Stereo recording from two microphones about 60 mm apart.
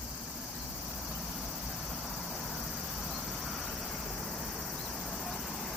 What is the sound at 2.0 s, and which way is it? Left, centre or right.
Vehicle, centre.